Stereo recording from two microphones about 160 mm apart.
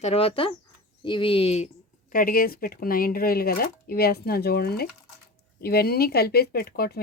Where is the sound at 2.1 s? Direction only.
60° left (ahead or behind).